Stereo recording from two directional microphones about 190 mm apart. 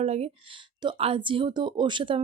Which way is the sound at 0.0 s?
35° right (ahead or behind).